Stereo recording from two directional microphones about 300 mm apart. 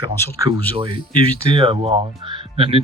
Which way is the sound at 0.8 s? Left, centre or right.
Centre.